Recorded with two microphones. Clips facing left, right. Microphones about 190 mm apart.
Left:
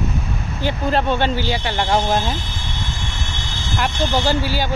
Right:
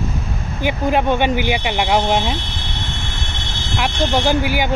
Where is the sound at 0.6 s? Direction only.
15° right (ahead or behind).